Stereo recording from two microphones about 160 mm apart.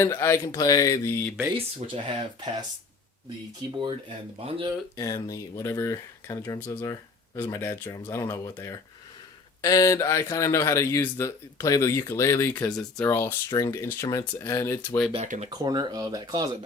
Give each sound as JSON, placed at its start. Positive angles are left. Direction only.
{"t": 0.0, "sound": "speech", "side_deg": 15}
{"t": 1.5, "sound": "speech", "side_deg": -35}
{"t": 4.4, "sound": "speech", "side_deg": -35}
{"t": 4.9, "sound": "speech", "side_deg": 20}
{"t": 15.1, "sound": "speech", "side_deg": -40}
{"t": 15.4, "sound": "speech", "side_deg": -25}